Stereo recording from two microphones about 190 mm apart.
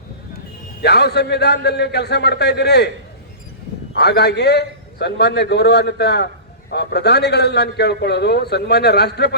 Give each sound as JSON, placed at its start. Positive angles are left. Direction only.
{"t": 0.8, "sound": "a man's voice", "side_deg": 60}
{"t": 3.9, "sound": "a man's voice", "side_deg": 60}